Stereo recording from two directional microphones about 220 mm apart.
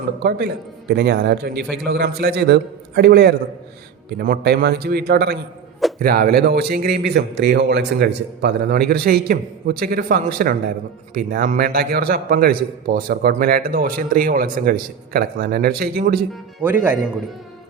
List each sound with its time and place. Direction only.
0.2 s a man's voice: 45° right (ahead or behind)
16.3 s speech: 10° right (ahead or behind)